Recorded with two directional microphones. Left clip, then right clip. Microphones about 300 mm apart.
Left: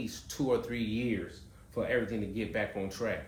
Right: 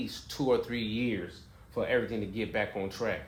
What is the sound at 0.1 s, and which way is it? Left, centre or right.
Speech, centre.